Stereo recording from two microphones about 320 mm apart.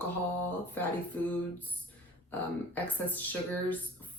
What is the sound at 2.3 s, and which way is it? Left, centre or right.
Speech, centre.